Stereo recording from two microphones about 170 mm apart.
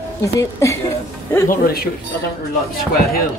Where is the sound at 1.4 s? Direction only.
60° left (ahead or behind).